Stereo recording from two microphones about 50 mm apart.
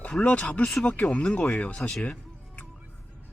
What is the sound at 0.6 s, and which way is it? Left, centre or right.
Speech, centre.